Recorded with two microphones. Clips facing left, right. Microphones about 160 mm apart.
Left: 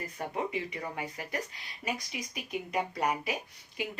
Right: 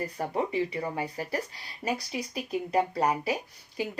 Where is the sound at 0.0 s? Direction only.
35° right (ahead or behind).